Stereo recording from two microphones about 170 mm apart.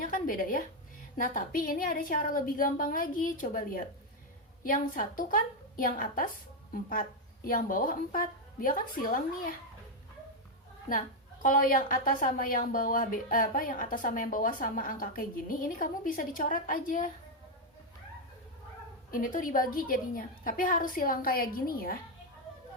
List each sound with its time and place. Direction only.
0.0 s a woman's voice: 55° left (ahead or behind)
7.4 s speech: 55° left (ahead or behind)
11.4 s speech: 55° left (ahead or behind)
19.1 s speech: 55° left (ahead or behind)